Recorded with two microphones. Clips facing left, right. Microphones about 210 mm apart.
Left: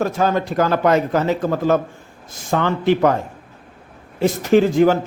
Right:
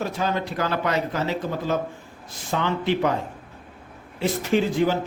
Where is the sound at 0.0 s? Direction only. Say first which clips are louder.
Left 7 dB; 45° left (ahead or behind).